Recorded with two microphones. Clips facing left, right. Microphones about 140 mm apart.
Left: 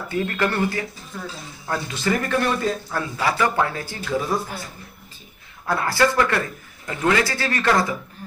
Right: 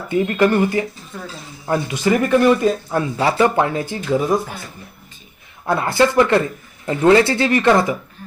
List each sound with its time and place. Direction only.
0.1 s speech: 20° right (ahead or behind)
5.6 s speech: 20° right (ahead or behind)